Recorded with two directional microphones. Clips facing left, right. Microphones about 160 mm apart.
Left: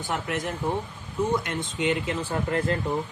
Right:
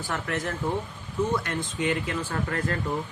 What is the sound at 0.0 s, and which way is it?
Speech, 20° left (ahead or behind).